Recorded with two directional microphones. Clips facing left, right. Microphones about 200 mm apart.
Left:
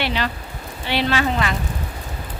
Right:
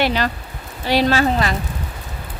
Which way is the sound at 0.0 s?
45° right (ahead or behind).